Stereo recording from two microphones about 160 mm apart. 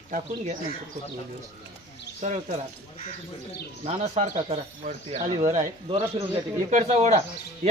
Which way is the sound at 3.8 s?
45° right (ahead or behind).